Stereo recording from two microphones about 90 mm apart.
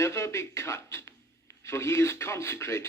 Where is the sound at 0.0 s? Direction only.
30° left (ahead or behind).